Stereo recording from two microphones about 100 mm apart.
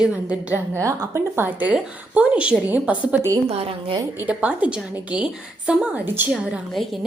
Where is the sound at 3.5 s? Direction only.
75° right (ahead or behind).